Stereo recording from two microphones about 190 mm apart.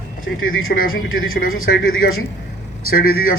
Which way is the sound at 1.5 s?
50° left (ahead or behind).